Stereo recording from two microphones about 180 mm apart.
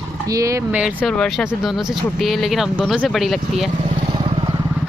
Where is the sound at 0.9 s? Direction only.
5° left (ahead or behind).